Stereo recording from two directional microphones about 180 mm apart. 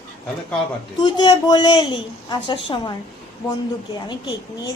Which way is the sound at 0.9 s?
25° left (ahead or behind).